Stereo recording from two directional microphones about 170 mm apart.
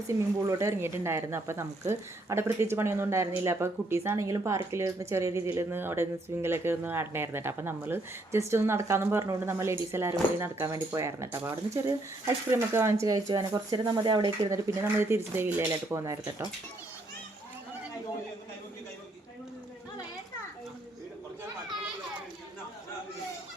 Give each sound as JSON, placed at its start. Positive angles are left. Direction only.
{"t": 0.1, "sound": "speech", "side_deg": -20}